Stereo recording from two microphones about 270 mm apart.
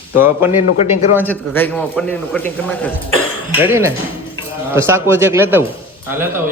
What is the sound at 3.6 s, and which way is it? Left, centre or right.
Speech, centre.